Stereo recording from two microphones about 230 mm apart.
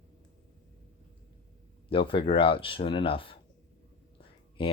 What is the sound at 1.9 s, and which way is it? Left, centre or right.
Speech, left.